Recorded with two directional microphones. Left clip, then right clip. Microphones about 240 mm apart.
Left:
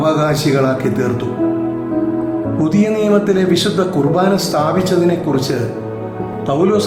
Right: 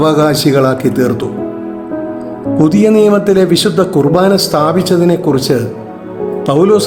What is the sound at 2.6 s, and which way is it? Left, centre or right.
A man's voice, right.